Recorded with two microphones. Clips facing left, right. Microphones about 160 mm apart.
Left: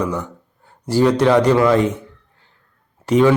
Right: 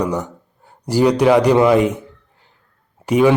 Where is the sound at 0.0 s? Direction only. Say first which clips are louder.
Right 2 dB; 15° right (ahead or behind).